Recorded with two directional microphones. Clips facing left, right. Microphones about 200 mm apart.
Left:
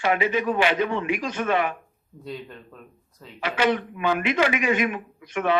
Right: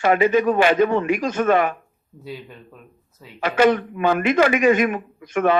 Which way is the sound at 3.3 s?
45° right (ahead or behind).